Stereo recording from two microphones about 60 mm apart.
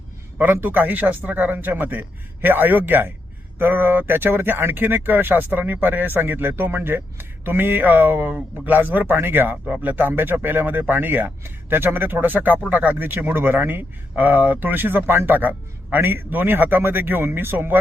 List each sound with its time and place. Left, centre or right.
0.3 s speech: right